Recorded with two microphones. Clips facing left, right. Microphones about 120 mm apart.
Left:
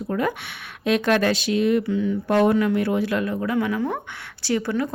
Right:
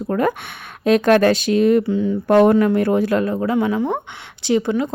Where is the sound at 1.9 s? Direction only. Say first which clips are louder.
Right 3 dB; 35° right (ahead or behind).